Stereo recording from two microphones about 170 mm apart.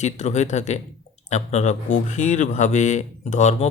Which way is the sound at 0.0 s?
45° left (ahead or behind).